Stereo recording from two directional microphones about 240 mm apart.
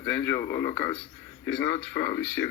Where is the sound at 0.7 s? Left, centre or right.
Left.